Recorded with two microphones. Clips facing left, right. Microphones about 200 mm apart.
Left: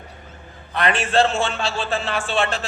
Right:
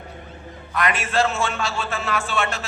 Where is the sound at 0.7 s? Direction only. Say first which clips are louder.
Left 3 dB; 30° left (ahead or behind).